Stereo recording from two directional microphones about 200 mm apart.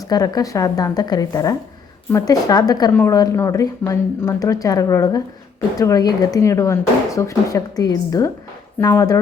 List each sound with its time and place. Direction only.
0.1 s a woman's voice: 20° left (ahead or behind)